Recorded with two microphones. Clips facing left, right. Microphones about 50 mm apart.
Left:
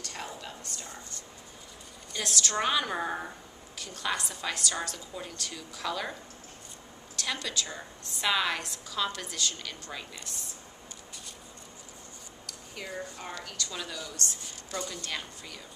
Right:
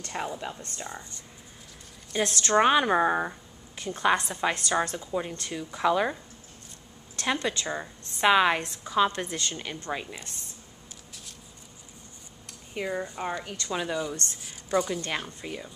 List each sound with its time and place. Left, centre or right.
0.0 s speech: right
2.2 s speech: right
7.2 s a woman's voice: right
12.4 s speech: right
14.4 s a sound: centre
15.0 s speech: right